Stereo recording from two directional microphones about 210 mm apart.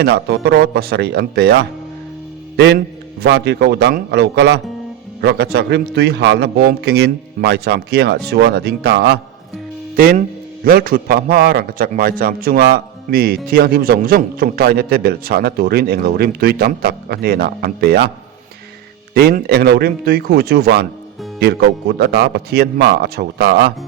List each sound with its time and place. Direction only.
0.0 s a man's voice: 50° right (ahead or behind)
9.9 s a man's voice: 40° right (ahead or behind)
19.1 s a man's voice: 50° right (ahead or behind)